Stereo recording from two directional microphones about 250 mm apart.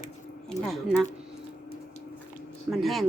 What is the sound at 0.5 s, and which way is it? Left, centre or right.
Speech, left.